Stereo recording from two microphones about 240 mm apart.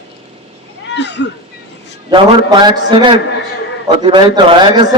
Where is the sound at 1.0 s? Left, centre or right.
Left.